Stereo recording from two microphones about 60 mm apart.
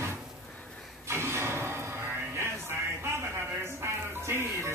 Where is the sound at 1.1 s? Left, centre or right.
Right.